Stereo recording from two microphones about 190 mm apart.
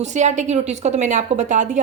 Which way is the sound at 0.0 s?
40° right (ahead or behind).